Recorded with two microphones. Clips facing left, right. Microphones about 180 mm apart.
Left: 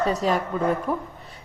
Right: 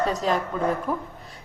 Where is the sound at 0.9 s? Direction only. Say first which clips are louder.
Left 1 dB; 30° left (ahead or behind).